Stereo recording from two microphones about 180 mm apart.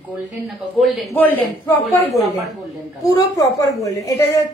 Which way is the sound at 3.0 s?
20° left (ahead or behind).